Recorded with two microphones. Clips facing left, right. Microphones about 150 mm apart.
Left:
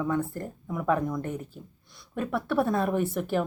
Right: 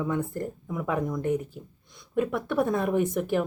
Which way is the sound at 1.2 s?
15° right (ahead or behind).